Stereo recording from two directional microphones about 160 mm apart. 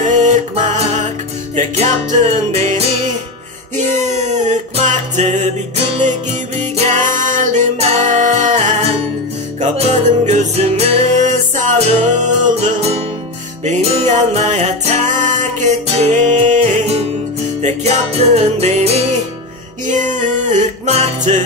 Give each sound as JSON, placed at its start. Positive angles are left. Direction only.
{"t": 0.0, "sound": "music", "side_deg": -50}
{"t": 6.8, "sound": "music", "side_deg": -50}